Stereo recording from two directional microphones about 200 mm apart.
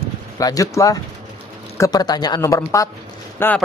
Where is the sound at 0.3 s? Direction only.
15° left (ahead or behind).